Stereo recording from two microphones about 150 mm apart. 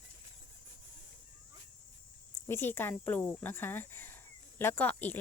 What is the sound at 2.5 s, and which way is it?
Speech, 15° left (ahead or behind).